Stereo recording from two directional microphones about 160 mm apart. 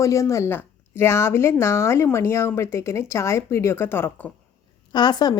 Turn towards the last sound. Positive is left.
turn(degrees=25)  # may be behind; listen again after turning